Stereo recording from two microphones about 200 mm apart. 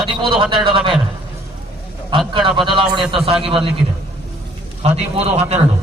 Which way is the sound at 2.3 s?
25° right (ahead or behind).